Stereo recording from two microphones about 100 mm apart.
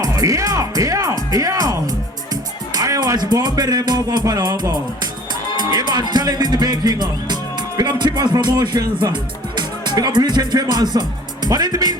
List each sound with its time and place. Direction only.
0.0 s speech: 35° right (ahead or behind)
5.5 s music: 45° right (ahead or behind)
9.6 s speech: 45° right (ahead or behind)